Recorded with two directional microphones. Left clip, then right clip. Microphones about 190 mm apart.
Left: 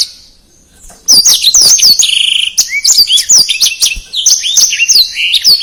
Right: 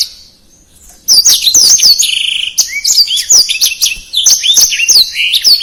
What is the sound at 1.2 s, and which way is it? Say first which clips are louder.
Chirp: left 1 dB; 25° left (ahead or behind).